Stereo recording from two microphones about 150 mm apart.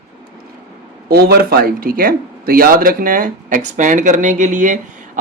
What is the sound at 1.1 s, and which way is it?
Speech, 90° right.